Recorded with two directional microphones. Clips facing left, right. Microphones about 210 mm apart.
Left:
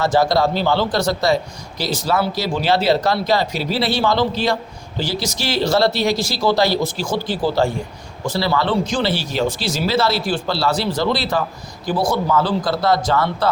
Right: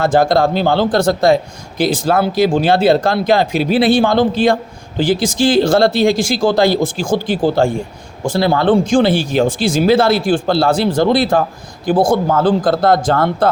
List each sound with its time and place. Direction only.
0.0 s speech: 50° right (ahead or behind)